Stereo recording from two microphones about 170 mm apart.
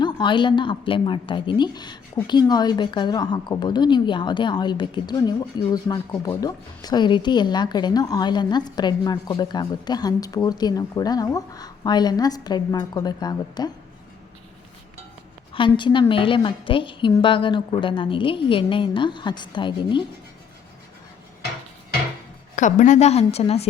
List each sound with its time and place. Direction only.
0.0 s a woman's voice: 25° left (ahead or behind)
15.5 s a woman's voice: 30° left (ahead or behind)
22.5 s a woman's voice: 45° left (ahead or behind)